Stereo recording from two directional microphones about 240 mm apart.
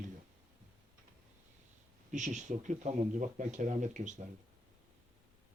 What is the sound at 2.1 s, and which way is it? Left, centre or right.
Speech, right.